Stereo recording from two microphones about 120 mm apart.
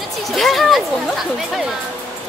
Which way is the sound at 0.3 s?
Centre (ahead or behind).